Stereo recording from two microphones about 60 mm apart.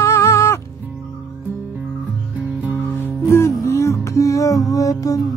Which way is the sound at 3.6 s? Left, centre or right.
Left.